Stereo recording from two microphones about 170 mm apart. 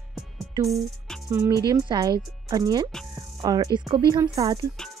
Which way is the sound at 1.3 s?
15° right (ahead or behind).